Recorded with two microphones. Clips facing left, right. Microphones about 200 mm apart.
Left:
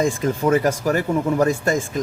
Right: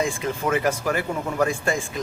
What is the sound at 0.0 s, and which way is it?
Speech, 40° left (ahead or behind).